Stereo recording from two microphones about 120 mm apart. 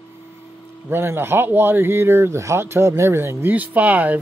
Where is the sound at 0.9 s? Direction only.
20° right (ahead or behind).